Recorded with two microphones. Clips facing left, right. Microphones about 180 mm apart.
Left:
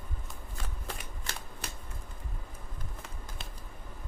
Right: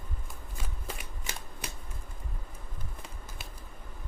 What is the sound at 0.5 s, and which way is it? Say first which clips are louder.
Shuffling cards: even; 5° right (ahead or behind).